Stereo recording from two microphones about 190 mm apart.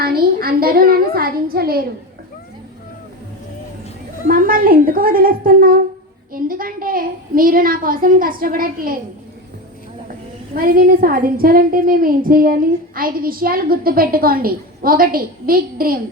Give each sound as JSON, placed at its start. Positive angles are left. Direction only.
{"t": 0.0, "sound": "a woman's voice", "side_deg": -50}
{"t": 4.3, "sound": "a woman's voice", "side_deg": -50}
{"t": 10.5, "sound": "a woman's voice", "side_deg": -50}